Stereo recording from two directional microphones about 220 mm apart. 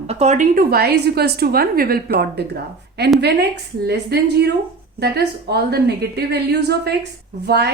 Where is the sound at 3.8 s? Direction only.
50° right (ahead or behind).